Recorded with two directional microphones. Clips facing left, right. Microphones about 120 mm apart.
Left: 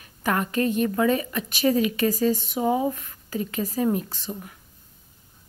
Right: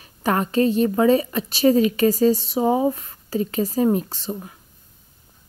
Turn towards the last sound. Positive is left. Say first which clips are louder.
# right 4 dB
turn(degrees=-35)  # may be behind; listen again after turning